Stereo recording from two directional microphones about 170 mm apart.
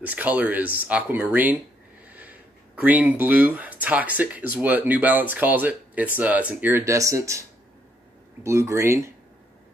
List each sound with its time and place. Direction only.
0.0 s speech: 10° right (ahead or behind)
8.5 s speech: 15° right (ahead or behind)